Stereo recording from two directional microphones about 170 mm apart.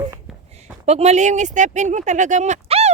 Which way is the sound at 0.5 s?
40° right (ahead or behind).